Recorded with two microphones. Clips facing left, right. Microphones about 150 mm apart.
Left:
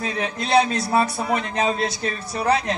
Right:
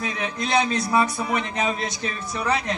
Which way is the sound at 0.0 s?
35° left (ahead or behind).